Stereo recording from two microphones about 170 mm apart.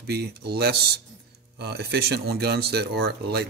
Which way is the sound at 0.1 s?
70° right (ahead or behind).